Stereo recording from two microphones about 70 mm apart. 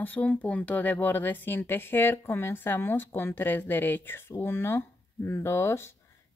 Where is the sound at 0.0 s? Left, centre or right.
Left.